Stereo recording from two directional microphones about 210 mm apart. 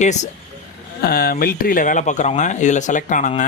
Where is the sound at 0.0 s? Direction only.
35° left (ahead or behind).